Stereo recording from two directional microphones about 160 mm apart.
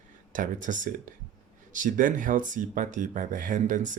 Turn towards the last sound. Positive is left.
turn(degrees=-55)  # may be behind; listen again after turning